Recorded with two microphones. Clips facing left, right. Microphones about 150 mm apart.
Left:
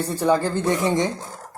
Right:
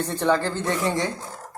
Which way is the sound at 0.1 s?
10° left (ahead or behind).